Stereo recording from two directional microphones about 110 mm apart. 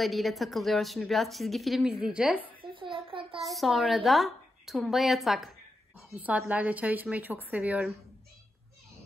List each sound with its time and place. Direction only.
0.0 s a woman's voice: centre (ahead or behind)
2.6 s a sound: 50° right (ahead or behind)
3.3 s a woman's voice: centre (ahead or behind)
5.9 s a woman's voice: 10° right (ahead or behind)